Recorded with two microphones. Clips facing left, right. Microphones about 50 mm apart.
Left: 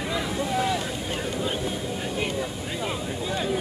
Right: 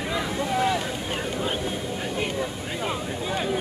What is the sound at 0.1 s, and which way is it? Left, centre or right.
Boat, centre.